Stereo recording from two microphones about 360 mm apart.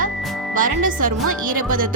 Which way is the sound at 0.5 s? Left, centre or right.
Right.